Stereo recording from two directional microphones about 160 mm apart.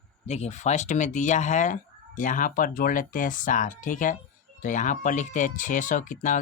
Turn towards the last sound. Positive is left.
turn(degrees=55)  # may be behind; listen again after turning